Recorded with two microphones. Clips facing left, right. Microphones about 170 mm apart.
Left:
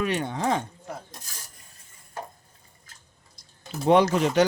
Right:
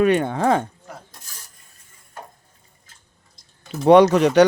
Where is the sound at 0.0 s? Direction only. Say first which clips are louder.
Right 9 dB; 55° right (ahead or behind).